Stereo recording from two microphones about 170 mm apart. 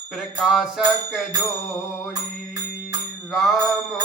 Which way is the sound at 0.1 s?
Centre (ahead or behind).